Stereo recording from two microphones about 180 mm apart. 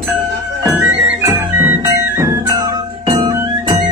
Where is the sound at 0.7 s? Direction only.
15° right (ahead or behind).